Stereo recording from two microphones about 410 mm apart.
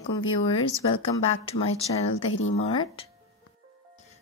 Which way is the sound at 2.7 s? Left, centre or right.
Centre.